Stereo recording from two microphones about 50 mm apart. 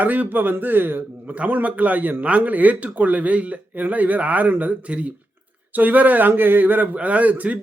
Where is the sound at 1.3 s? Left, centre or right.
Right.